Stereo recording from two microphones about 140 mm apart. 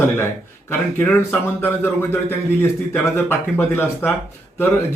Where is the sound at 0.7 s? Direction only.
15° left (ahead or behind).